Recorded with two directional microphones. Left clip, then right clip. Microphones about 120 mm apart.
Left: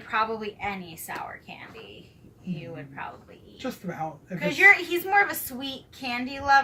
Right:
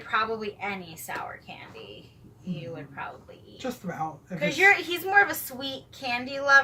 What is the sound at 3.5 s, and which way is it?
Speech, 5° left (ahead or behind).